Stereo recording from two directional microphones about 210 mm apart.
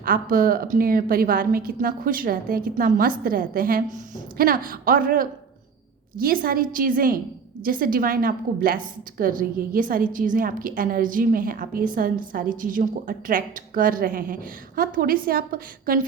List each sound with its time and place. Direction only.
0.0 s a woman's voice: 40° right (ahead or behind)